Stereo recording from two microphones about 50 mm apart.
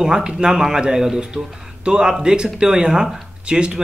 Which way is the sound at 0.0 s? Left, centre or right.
Centre.